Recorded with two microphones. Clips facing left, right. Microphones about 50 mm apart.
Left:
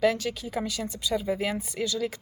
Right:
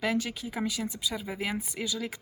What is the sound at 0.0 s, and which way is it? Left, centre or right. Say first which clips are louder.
A woman's voice: left 5 dB; centre.